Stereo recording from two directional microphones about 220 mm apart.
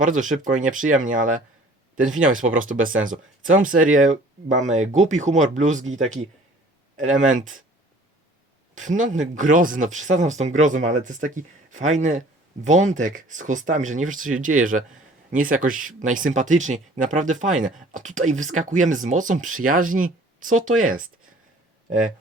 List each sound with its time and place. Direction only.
0.0 s speech: 35° right (ahead or behind)
3.8 s speech: 70° right (ahead or behind)
4.0 s speech: 35° right (ahead or behind)
9.0 s speech: 35° right (ahead or behind)